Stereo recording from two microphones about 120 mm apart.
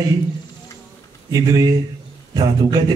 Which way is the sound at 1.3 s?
35° right (ahead or behind).